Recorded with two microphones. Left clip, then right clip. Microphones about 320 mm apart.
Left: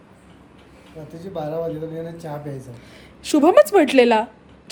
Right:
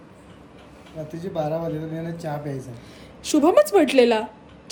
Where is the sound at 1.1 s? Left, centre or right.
Centre.